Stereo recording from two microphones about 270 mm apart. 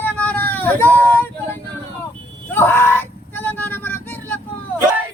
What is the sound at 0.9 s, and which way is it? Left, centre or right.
Speech, centre.